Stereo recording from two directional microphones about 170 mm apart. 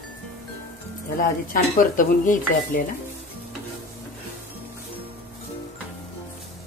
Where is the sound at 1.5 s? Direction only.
55° left (ahead or behind).